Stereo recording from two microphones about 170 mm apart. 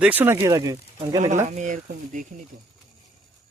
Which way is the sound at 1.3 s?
45° right (ahead or behind).